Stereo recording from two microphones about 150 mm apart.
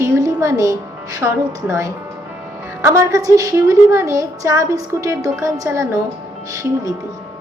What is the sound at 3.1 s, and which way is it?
A woman's voice, 25° right (ahead or behind).